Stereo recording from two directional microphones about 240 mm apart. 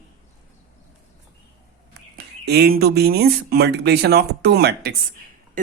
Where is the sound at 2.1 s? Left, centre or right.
Right.